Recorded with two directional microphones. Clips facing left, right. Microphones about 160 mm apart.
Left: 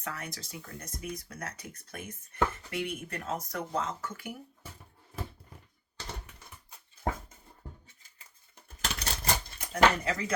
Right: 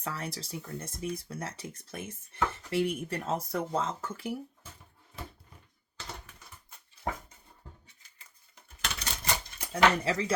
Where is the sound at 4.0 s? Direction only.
30° right (ahead or behind).